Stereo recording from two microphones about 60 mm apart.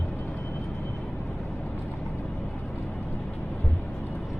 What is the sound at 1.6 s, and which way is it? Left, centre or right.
Vehicle, left.